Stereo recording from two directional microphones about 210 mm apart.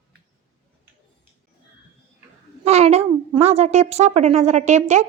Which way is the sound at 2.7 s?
30° right (ahead or behind).